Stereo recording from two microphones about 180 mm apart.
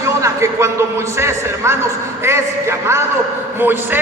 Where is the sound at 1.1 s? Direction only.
15° right (ahead or behind).